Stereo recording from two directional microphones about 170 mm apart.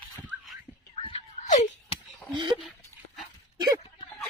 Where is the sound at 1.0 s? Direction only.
40° left (ahead or behind).